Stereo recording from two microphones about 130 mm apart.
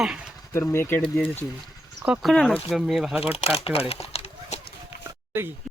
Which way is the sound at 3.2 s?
50° left (ahead or behind).